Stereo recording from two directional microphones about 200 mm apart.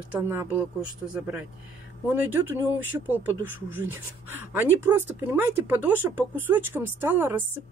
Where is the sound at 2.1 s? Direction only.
10° right (ahead or behind).